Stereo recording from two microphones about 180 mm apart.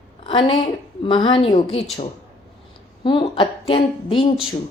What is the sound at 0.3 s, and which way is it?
Speech, 30° left (ahead or behind).